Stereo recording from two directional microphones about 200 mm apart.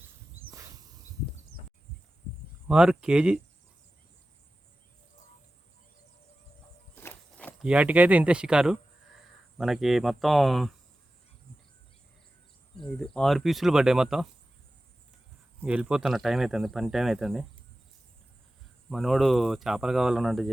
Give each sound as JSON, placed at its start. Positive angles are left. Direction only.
{"t": 0.4, "sound": "a sound", "side_deg": -80}
{"t": 2.6, "sound": "speech", "side_deg": -5}
{"t": 6.9, "sound": "walk", "side_deg": 10}
{"t": 7.6, "sound": "speech", "side_deg": -5}
{"t": 13.0, "sound": "speech", "side_deg": 0}
{"t": 15.6, "sound": "speech", "side_deg": -5}
{"t": 18.9, "sound": "speech", "side_deg": 0}